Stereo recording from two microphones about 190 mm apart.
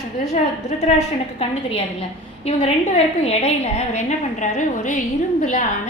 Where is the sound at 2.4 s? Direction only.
30° left (ahead or behind).